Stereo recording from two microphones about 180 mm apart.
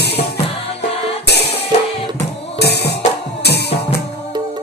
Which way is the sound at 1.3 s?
65° left (ahead or behind).